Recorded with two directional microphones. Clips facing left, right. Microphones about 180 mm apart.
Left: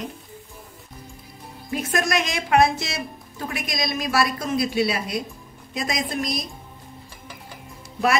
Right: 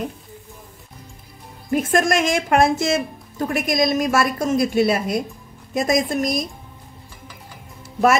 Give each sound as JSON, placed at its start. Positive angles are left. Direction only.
{"t": 1.7, "sound": "a woman's voice", "side_deg": -50}